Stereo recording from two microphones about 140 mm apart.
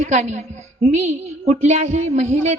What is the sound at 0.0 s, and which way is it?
A woman's voice, 55° right (ahead or behind).